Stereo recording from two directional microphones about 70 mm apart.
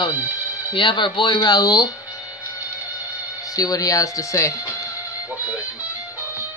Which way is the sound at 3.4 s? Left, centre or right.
Left.